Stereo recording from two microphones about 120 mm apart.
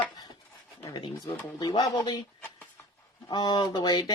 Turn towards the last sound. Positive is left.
turn(degrees=35)  # may be behind; listen again after turning